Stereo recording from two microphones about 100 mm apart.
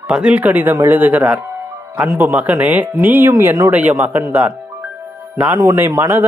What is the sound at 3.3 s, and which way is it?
Speech, 35° right (ahead or behind).